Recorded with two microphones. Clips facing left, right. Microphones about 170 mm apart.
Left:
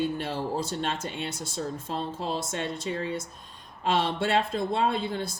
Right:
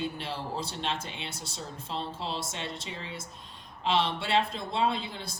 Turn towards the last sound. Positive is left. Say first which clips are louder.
# left 3 dB
turn(degrees=50)  # may be behind; listen again after turning